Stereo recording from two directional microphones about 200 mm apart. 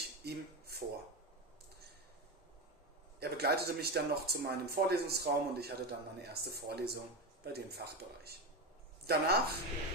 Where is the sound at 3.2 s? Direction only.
55° right (ahead or behind).